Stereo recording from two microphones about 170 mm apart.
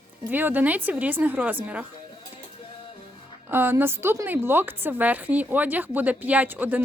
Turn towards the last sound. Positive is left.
turn(degrees=-10)  # may be behind; listen again after turning